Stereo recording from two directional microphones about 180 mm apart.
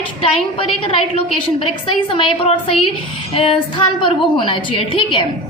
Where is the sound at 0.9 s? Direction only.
30° left (ahead or behind).